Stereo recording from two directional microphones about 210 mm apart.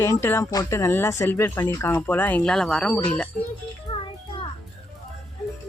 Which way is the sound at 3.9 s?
30° left (ahead or behind).